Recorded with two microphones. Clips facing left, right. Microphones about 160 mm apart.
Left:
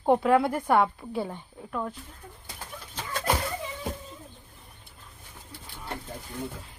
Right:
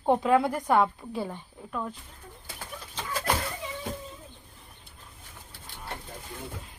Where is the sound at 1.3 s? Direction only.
5° left (ahead or behind).